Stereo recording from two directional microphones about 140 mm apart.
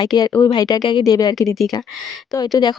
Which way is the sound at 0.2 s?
30° left (ahead or behind).